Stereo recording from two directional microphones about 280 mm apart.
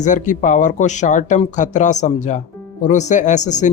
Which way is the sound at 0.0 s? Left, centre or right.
Left.